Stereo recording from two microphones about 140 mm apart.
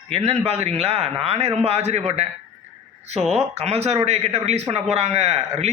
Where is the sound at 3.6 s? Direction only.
50° right (ahead or behind).